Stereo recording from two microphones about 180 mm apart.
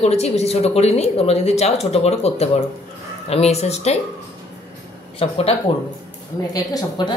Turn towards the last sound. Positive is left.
turn(degrees=20)  # may be behind; listen again after turning